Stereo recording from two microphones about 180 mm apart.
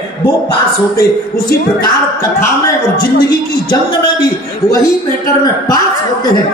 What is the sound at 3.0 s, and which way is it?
Speech, 60° left (ahead or behind).